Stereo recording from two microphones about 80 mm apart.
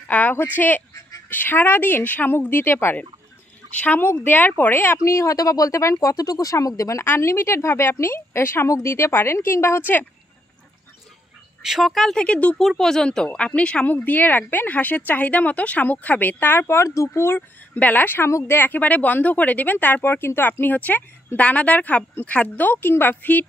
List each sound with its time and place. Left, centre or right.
0.1 s a woman's voice: left
11.6 s speech: centre
12.5 s a woman's voice: centre; by 17.4 s left
17.7 s a woman's voice: left